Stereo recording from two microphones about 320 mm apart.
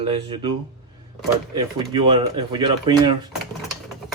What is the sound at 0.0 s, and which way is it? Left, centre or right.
Speech, centre.